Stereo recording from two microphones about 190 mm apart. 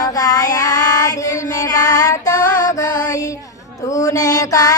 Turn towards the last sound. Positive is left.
turn(degrees=20)  # may be behind; listen again after turning